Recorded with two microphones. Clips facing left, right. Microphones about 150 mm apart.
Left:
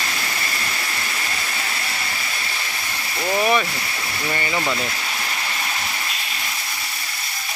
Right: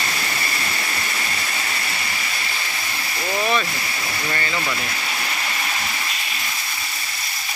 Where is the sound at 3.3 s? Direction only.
15° left (ahead or behind).